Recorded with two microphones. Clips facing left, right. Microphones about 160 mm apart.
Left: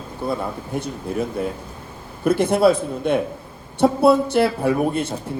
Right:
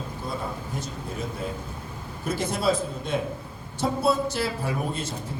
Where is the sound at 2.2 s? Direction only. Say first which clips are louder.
Left 10 dB; 60° left (ahead or behind).